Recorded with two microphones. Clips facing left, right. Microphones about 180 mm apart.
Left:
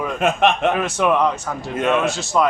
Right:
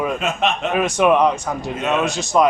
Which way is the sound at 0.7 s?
15° right (ahead or behind).